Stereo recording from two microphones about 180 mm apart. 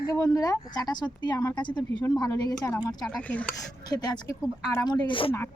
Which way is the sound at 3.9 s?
20° left (ahead or behind).